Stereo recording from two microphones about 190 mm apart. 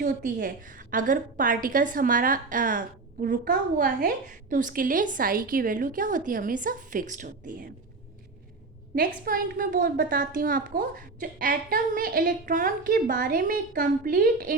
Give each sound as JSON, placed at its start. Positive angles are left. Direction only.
{"t": 0.0, "sound": "a woman's voice", "side_deg": -45}
{"t": 9.0, "sound": "a woman's voice", "side_deg": -50}